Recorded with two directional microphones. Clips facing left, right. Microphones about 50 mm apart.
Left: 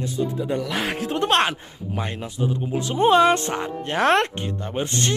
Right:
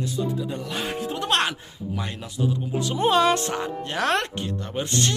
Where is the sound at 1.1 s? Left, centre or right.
Left.